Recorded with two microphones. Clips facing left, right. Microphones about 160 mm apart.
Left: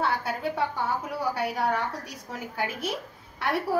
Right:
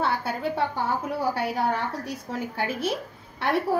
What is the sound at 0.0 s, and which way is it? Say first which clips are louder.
A woman's voice: right 1 dB; 30° right (ahead or behind).